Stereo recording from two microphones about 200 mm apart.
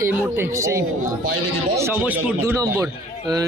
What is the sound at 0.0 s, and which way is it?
A man's voice, 15° right (ahead or behind).